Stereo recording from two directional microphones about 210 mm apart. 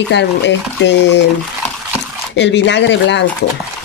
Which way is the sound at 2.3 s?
55° left (ahead or behind).